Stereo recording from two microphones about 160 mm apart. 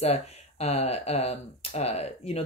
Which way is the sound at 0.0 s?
40° left (ahead or behind).